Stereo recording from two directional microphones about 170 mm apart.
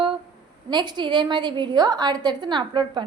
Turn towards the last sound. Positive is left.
turn(degrees=-25)  # may be behind; listen again after turning